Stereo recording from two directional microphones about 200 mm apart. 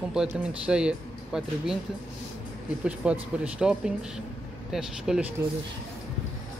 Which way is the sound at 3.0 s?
5° right (ahead or behind).